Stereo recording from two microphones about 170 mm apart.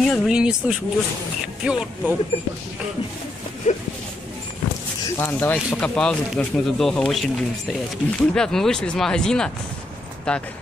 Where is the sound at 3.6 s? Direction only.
50° left (ahead or behind).